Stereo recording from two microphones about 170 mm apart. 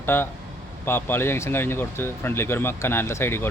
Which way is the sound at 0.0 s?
15° left (ahead or behind).